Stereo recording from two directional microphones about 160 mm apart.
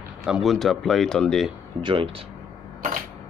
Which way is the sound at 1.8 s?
35° right (ahead or behind).